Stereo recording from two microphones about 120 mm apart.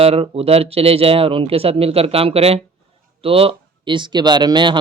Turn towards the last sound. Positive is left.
turn(degrees=-40)  # may be behind; listen again after turning